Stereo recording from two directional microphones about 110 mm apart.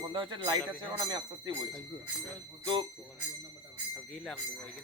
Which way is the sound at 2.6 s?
45° right (ahead or behind).